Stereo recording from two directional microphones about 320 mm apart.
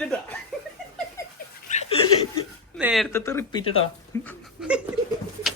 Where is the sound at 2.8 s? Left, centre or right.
Centre.